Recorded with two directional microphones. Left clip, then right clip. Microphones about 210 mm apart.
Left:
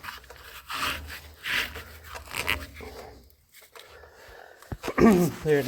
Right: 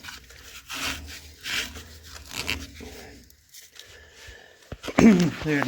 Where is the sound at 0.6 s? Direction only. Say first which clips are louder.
Left 1 dB; 15° right (ahead or behind).